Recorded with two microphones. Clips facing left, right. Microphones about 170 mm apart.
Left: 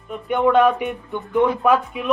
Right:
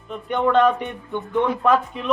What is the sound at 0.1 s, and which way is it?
Speech, 5° left (ahead or behind).